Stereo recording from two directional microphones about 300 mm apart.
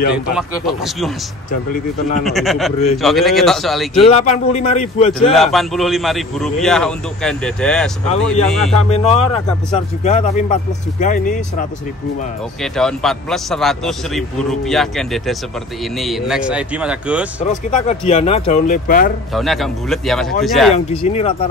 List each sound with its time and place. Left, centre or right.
0.1 s speech: centre
1.7 s speech: left
2.2 s speech: centre
4.0 s speech: left
5.3 s speech: centre
8.9 s speech: left
12.6 s speech: centre
17.5 s speech: left
19.3 s speech: centre
20.7 s speech: left